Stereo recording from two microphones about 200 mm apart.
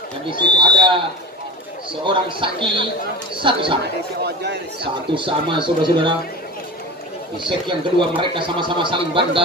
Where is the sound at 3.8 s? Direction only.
55° right (ahead or behind).